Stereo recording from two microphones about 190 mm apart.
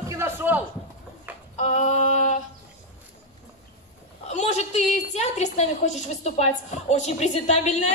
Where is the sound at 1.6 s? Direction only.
40° left (ahead or behind).